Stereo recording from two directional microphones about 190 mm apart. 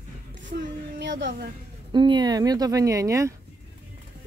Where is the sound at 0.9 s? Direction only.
70° right (ahead or behind).